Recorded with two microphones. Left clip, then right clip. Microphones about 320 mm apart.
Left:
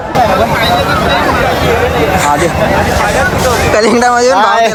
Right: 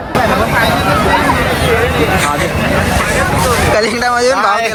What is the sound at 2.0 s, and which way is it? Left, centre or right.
Speech, left.